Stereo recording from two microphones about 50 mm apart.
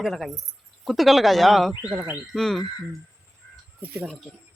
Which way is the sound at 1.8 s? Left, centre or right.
Right.